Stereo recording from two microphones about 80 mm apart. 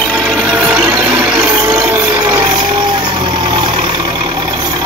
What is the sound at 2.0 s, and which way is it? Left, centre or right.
Vehicle, right.